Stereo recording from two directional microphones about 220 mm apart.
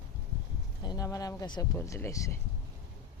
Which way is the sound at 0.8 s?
15° left (ahead or behind).